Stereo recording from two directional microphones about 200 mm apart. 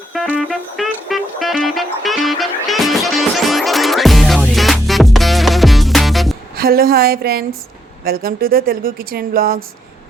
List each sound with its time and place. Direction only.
0.1 s music: centre (ahead or behind)
6.6 s speech: 50° right (ahead or behind)